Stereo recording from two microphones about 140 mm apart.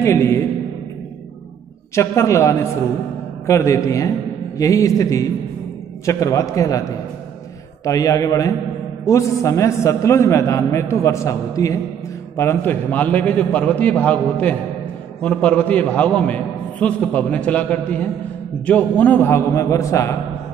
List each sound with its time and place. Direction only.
0.0 s a man's voice: 20° left (ahead or behind)
2.0 s a man's voice: 20° left (ahead or behind)